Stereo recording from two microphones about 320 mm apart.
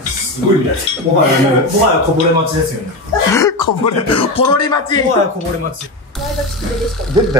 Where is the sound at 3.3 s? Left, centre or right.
Centre.